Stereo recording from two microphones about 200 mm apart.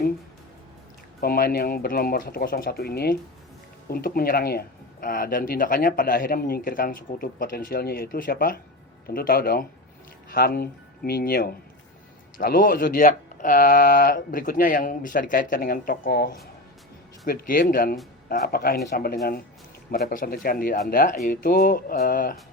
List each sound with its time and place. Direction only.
1.2 s speech: 50° left (ahead or behind)